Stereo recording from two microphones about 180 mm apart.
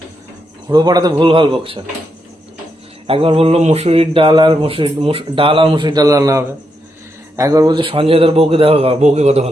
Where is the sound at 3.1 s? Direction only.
30° right (ahead or behind).